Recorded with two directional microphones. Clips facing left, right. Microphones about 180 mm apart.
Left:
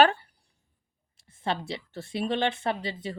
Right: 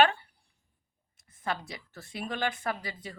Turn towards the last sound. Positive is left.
turn(degrees=25)  # may be behind; listen again after turning